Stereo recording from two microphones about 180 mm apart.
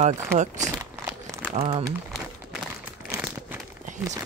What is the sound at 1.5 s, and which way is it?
Speech, 40° right (ahead or behind).